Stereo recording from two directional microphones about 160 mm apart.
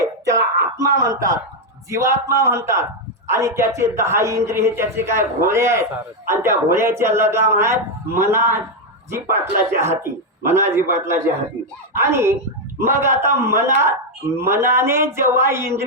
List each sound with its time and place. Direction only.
0.0 s wail: 20° right (ahead or behind)
1.0 s a man's voice: 20° right (ahead or behind)